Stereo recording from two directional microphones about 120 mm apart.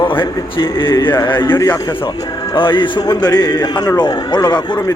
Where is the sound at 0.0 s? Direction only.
45° left (ahead or behind).